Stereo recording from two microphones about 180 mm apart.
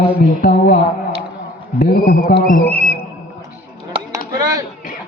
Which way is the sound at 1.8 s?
55° left (ahead or behind).